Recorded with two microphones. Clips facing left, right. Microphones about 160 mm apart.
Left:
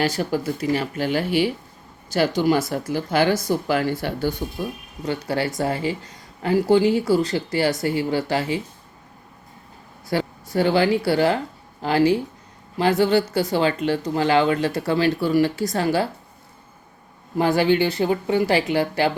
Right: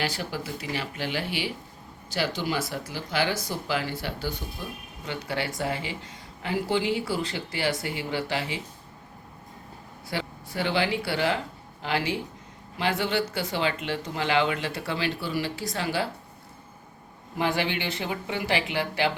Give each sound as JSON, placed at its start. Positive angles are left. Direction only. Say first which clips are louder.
{"t": 0.0, "sound": "speech", "louder": "left 9 dB", "side_deg": 45}
{"t": 5.0, "sound": "speech", "louder": "left 7 dB", "side_deg": 40}
{"t": 10.1, "sound": "speech", "louder": "left 9 dB", "side_deg": 40}
{"t": 17.3, "sound": "speech", "louder": "left 9 dB", "side_deg": 40}